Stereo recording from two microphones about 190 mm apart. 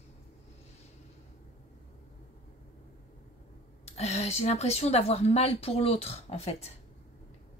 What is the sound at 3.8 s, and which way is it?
A woman's voice, 35° left (ahead or behind).